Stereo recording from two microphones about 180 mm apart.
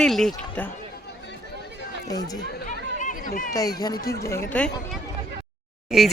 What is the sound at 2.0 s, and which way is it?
Speech, 20° left (ahead or behind).